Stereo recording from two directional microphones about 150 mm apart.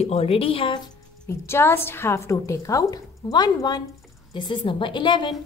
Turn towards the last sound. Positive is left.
turn(degrees=30)  # may be behind; listen again after turning